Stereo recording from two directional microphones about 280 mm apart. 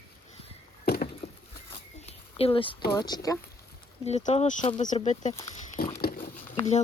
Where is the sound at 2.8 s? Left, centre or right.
Centre.